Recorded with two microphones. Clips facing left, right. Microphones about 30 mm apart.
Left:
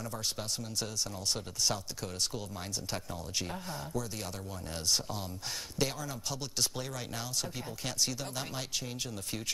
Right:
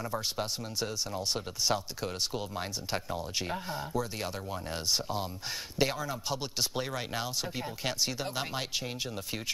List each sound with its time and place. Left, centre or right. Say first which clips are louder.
0.0 s speech: right 4 dB; right
5.8 s speech: right 5 dB; right